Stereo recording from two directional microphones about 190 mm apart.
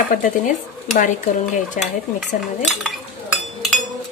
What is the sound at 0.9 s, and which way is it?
Speech, 45° left (ahead or behind).